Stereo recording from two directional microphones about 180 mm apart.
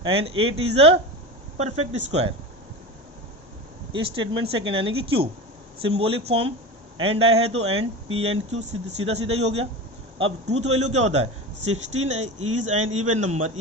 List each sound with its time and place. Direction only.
0.0 s speech: 30° right (ahead or behind)
3.9 s speech: 30° right (ahead or behind)